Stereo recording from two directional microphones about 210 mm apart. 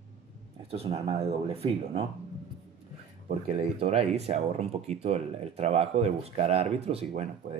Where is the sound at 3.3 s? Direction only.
30° right (ahead or behind).